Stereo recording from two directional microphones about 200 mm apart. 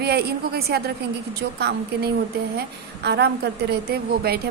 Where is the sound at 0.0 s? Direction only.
55° right (ahead or behind).